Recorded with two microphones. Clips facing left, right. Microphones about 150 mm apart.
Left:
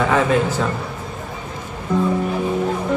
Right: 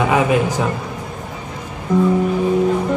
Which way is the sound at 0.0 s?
10° right (ahead or behind).